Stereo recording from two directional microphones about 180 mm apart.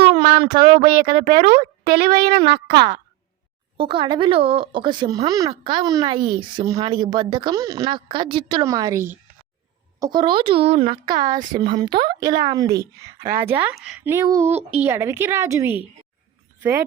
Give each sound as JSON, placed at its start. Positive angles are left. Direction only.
{"t": 0.1, "sound": "a sound", "side_deg": -30}
{"t": 0.4, "sound": "speech", "side_deg": -55}
{"t": 3.8, "sound": "speech", "side_deg": -25}
{"t": 13.4, "sound": "speech", "side_deg": -10}